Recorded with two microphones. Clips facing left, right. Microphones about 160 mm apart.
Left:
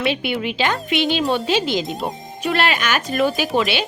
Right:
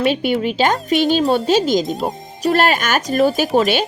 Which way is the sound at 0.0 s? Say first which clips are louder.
Right 5 dB; 40° right (ahead or behind).